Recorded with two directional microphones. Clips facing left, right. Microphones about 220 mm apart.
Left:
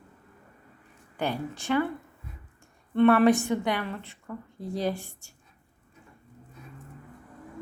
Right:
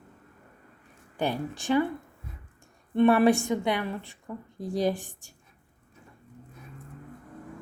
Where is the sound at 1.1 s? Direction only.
15° right (ahead or behind).